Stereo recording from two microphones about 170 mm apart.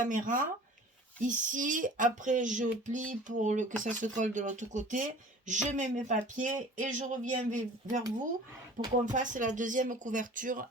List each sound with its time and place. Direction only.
0.0 s speech: 50° right (ahead or behind)
9.1 s speech: 50° right (ahead or behind)